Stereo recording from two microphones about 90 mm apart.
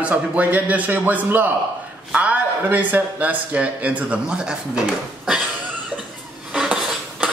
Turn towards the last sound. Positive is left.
turn(degrees=-5)  # may be behind; listen again after turning